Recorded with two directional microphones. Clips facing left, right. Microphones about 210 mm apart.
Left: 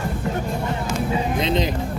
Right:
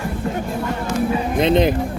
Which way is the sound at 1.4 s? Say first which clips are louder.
Right 9 dB; 55° right (ahead or behind).